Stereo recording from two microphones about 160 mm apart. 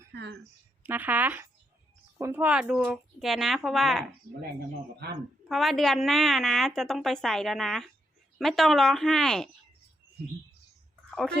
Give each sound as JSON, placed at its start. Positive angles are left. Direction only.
{"t": 0.1, "sound": "speech", "side_deg": -90}
{"t": 0.8, "sound": "a woman's voice", "side_deg": -10}
{"t": 5.5, "sound": "a woman's voice", "side_deg": 0}